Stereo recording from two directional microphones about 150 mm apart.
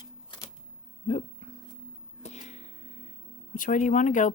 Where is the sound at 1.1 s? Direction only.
45° left (ahead or behind).